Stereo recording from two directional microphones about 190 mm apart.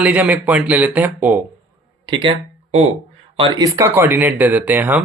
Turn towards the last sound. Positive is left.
turn(degrees=-10)  # may be behind; listen again after turning